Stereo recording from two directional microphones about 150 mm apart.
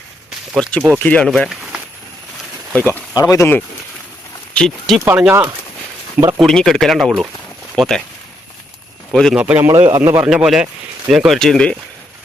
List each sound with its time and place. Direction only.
0.5 s speech: 5° left (ahead or behind)
2.7 s speech: 10° left (ahead or behind)
3.2 s speech: 20° left (ahead or behind)
4.5 s speech: 5° left (ahead or behind)
5.0 s speech: 15° right (ahead or behind)
6.1 s a man's voice: 20° right (ahead or behind)
6.4 s speech: centre (ahead or behind)
9.1 s speech: 5° left (ahead or behind)
9.4 s a man's voice: 10° right (ahead or behind)
10.2 s speech: 5° right (ahead or behind)